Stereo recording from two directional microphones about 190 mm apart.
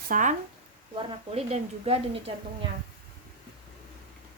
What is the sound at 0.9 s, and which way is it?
Speech, 30° right (ahead or behind).